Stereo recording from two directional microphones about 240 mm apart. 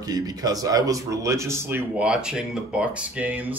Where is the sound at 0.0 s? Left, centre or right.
Centre.